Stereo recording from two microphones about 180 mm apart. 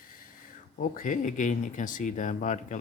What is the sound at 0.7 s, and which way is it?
Speech, 45° left (ahead or behind).